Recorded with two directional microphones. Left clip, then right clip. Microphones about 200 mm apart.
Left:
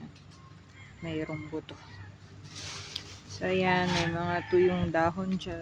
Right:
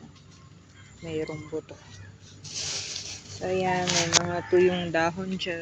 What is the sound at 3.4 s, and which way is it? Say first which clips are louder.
Speech: right 1 dB; 15° left (ahead or behind).